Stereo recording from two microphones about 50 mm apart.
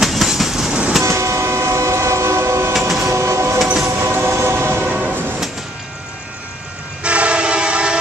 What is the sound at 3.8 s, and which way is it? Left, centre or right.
Train, right.